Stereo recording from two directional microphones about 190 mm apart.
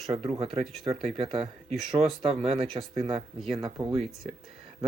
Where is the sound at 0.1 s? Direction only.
30° right (ahead or behind).